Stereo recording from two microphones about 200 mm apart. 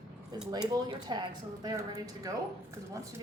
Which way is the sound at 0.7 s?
20° right (ahead or behind).